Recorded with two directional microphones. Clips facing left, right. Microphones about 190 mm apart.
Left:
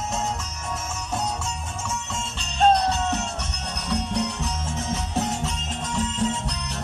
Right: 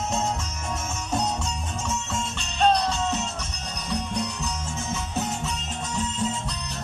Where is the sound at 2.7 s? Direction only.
55° left (ahead or behind); by 5.0 s 90° left.